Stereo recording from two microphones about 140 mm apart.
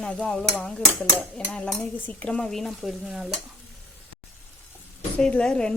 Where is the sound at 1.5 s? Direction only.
10° left (ahead or behind).